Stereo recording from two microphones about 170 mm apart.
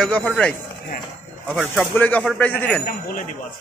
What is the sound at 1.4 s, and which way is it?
Speech, 10° right (ahead or behind).